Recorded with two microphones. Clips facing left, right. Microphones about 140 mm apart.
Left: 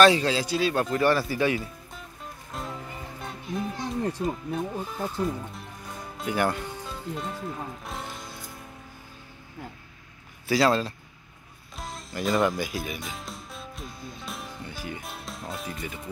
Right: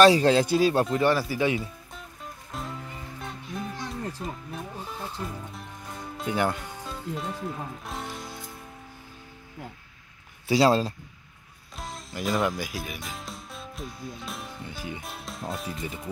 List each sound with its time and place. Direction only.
0.2 s speech: 50° right (ahead or behind)
0.9 s speech: 15° right (ahead or behind)
2.5 s music: centre (ahead or behind)
4.2 s speech: centre (ahead or behind)
10.5 s speech: 30° right (ahead or behind)
11.7 s music: centre (ahead or behind)
15.0 s speech: centre (ahead or behind)